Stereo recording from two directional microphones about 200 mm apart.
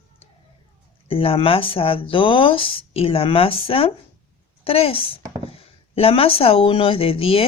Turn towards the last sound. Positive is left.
turn(degrees=30)  # may be behind; listen again after turning